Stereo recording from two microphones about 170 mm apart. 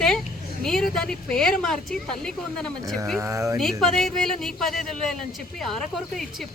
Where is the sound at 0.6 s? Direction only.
5° left (ahead or behind).